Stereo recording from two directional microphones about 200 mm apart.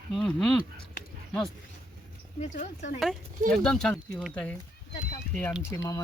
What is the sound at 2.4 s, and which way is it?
Speech, 35° left (ahead or behind).